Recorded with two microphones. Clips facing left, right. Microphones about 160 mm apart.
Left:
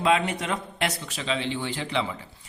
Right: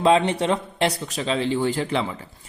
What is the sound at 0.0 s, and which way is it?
Speech, 30° right (ahead or behind).